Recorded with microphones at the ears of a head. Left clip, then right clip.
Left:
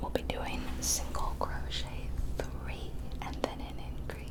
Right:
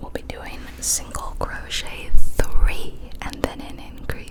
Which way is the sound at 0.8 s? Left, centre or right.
Right.